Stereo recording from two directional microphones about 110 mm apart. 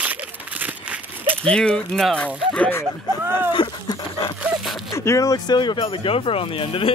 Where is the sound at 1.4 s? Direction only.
10° left (ahead or behind).